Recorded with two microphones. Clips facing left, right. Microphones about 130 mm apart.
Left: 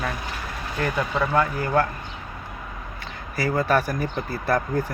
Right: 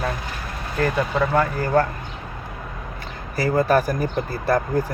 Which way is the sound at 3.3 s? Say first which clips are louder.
Right 3 dB; 40° right (ahead or behind).